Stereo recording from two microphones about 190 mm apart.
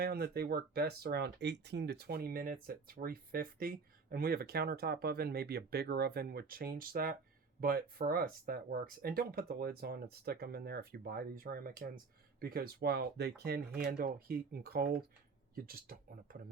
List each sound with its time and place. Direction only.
0.0 s speech: 55° right (ahead or behind)